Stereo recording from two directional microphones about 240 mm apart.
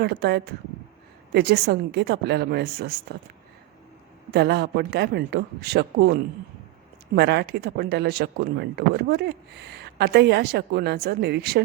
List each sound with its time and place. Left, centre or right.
0.0 s speech: right
4.3 s speech: right
7.2 s speech: right